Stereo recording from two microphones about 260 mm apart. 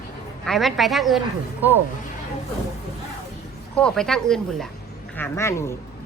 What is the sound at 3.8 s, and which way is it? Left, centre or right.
Speech, centre.